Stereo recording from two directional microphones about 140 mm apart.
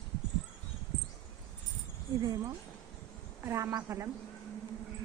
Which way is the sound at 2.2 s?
25° right (ahead or behind).